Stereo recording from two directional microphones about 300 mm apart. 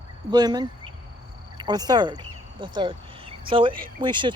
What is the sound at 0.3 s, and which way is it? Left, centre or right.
Speech, centre.